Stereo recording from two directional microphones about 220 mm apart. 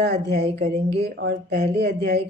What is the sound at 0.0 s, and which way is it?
Speech, 50° right (ahead or behind).